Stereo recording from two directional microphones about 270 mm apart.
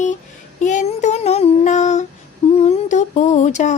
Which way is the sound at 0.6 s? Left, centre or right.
Left.